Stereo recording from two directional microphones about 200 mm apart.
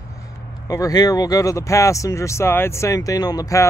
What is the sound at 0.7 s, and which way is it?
Speech, 20° left (ahead or behind).